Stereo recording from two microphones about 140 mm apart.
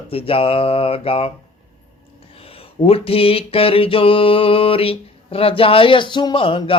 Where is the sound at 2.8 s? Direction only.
45° left (ahead or behind).